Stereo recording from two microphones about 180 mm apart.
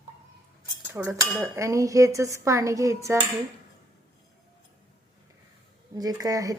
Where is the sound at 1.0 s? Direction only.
10° right (ahead or behind).